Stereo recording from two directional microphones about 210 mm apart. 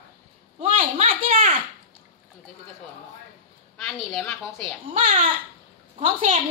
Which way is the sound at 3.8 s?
Centre (ahead or behind).